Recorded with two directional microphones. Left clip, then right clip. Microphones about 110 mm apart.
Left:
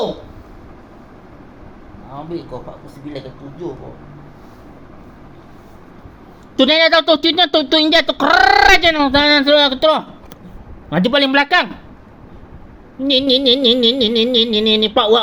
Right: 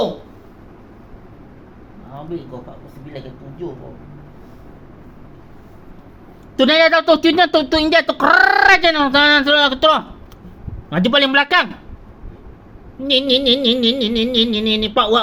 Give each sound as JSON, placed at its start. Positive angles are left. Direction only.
{"t": 6.6, "sound": "music", "side_deg": 40}
{"t": 6.9, "sound": "speech", "side_deg": 60}
{"t": 13.1, "sound": "music", "side_deg": 45}